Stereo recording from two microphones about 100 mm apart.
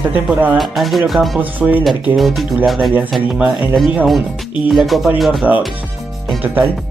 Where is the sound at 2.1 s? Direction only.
Centre (ahead or behind).